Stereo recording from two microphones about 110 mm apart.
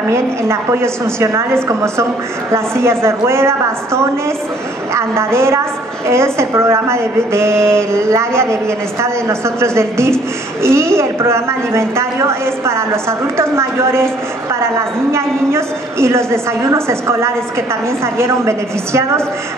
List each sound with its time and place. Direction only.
0.1 s a woman's voice: 25° right (ahead or behind)